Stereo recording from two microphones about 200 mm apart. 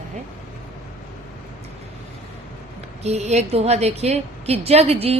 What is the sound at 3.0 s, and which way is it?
A woman's voice, 35° right (ahead or behind).